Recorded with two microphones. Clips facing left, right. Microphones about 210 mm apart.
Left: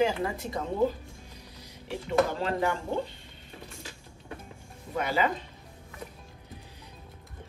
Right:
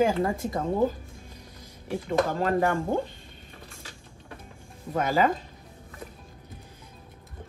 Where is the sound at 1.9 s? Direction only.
50° right (ahead or behind).